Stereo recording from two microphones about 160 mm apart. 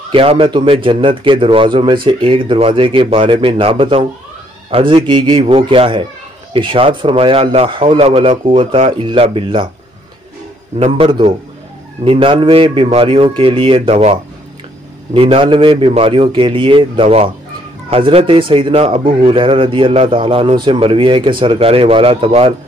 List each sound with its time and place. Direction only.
0.1 s speech: 35° right (ahead or behind)
10.8 s speech: 30° right (ahead or behind)